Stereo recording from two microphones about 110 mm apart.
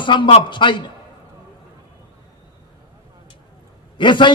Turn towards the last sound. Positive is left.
turn(degrees=45)  # may be behind; listen again after turning